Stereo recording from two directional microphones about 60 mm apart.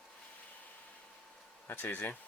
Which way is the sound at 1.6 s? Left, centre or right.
Left.